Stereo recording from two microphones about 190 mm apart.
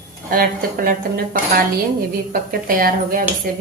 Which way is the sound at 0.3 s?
50° right (ahead or behind).